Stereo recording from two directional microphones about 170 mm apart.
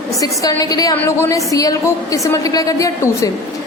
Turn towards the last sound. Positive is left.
turn(degrees=20)  # may be behind; listen again after turning